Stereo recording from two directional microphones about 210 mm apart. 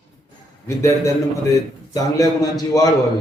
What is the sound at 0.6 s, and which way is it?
A man's voice, 10° left (ahead or behind).